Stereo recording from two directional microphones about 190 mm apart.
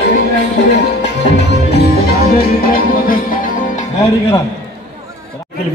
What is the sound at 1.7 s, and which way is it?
Music, 55° left (ahead or behind).